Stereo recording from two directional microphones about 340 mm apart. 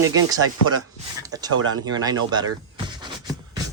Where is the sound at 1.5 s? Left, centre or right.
Right.